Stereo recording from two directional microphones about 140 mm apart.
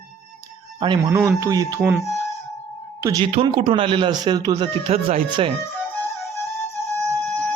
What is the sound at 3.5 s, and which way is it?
Speech, 40° right (ahead or behind).